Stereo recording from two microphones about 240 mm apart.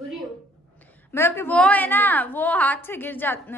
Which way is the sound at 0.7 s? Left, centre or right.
Centre.